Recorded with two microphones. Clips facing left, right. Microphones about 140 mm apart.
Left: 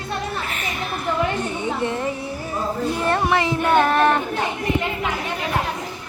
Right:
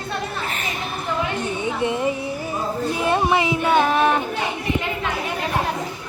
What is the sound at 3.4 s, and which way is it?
Child singing, 5° right (ahead or behind).